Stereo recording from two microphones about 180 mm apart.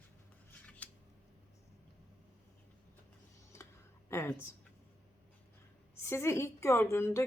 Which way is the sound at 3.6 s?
15° left (ahead or behind).